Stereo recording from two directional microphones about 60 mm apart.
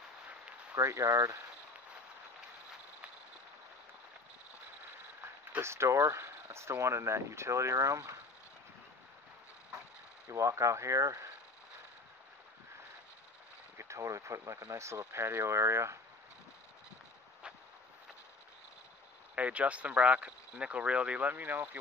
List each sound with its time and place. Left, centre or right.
0.7 s speech: right
5.6 s speech: right
10.2 s speech: right
13.7 s speech: right
19.3 s speech: right